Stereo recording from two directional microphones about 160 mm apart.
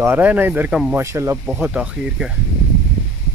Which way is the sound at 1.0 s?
15° right (ahead or behind).